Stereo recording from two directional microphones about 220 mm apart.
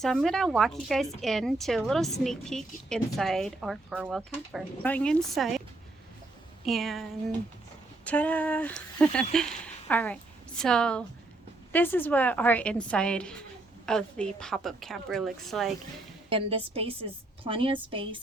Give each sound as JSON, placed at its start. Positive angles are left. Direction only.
{"t": 0.0, "sound": "a woman's voice", "side_deg": 0}
{"t": 6.7, "sound": "a woman's voice", "side_deg": 0}
{"t": 8.0, "sound": "a woman's voice", "side_deg": 5}
{"t": 16.3, "sound": "a woman's voice", "side_deg": -25}